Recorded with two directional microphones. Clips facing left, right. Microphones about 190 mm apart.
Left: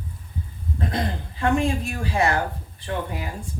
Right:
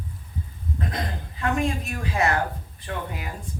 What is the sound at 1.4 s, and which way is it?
Speech, 30° left (ahead or behind).